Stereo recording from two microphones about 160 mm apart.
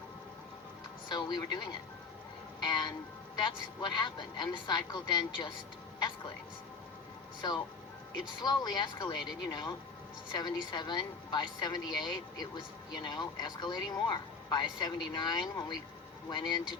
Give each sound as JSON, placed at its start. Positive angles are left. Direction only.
{"t": 1.0, "sound": "speech", "side_deg": 25}
{"t": 7.4, "sound": "speech", "side_deg": 30}